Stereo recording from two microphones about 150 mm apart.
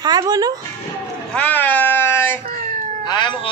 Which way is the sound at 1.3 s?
10° left (ahead or behind).